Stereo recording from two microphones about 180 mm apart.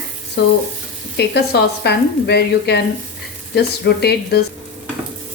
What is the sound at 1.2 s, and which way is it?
Speech, 65° left (ahead or behind).